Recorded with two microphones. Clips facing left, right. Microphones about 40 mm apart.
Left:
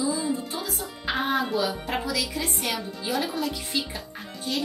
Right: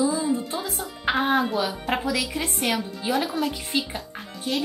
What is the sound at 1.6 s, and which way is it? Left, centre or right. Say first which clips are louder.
Music: right 2 dB; centre.